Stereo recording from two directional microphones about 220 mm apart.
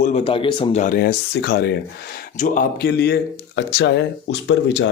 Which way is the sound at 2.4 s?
40° left (ahead or behind).